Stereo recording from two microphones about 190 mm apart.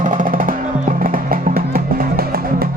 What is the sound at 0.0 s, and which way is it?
Music, 45° right (ahead or behind).